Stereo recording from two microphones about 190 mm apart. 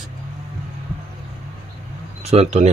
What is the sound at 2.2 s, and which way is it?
Speech, 35° right (ahead or behind).